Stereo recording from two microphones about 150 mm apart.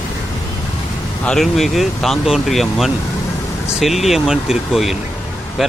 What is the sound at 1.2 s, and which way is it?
Speech, 5° left (ahead or behind).